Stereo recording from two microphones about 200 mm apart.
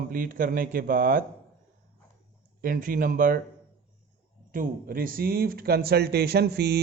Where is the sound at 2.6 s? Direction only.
45° right (ahead or behind).